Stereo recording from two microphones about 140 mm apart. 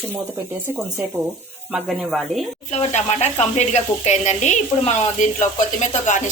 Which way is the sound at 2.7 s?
50° left (ahead or behind).